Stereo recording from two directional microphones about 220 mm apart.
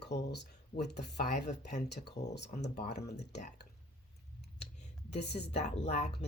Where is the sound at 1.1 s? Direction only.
30° left (ahead or behind).